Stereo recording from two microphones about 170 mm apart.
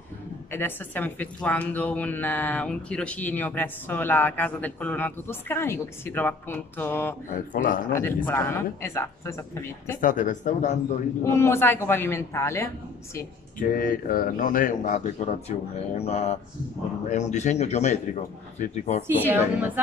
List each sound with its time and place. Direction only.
0.5 s a man's voice: 10° left (ahead or behind)
7.2 s speech: 55° left (ahead or behind)
7.9 s a man's voice: 15° left (ahead or behind)
9.9 s speech: 50° left (ahead or behind)
11.2 s a man's voice: 15° left (ahead or behind)
13.2 s speech: 55° left (ahead or behind)
19.0 s a woman's voice: 10° right (ahead or behind)